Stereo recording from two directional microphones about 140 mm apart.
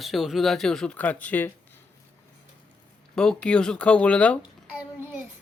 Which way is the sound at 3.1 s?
5° left (ahead or behind).